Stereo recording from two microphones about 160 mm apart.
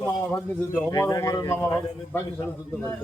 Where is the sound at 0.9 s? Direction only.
20° left (ahead or behind).